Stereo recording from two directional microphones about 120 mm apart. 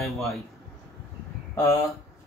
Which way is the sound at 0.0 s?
Centre (ahead or behind).